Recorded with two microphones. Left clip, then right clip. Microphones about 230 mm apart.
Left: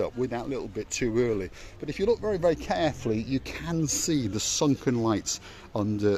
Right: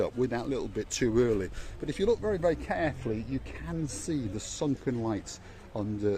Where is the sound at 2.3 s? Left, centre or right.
Left.